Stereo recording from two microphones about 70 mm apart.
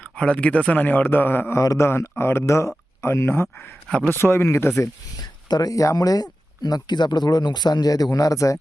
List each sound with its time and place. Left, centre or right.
0.0 s a man's voice: centre
1.5 s speech: left
3.8 s a man's voice: centre
4.1 s speech: left
5.5 s speech: left